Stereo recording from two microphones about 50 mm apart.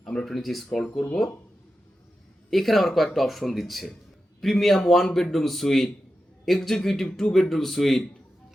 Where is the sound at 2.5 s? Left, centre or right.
Centre.